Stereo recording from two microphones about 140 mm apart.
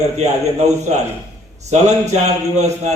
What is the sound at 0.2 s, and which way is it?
A man's voice, 55° right (ahead or behind).